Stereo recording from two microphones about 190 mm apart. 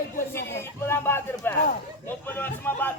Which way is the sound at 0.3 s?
15° left (ahead or behind).